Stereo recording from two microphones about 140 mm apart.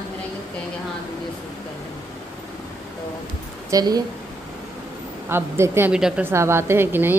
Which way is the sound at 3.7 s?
30° right (ahead or behind).